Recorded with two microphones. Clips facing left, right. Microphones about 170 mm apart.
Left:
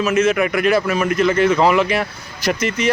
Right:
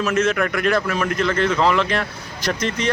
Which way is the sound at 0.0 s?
Centre (ahead or behind).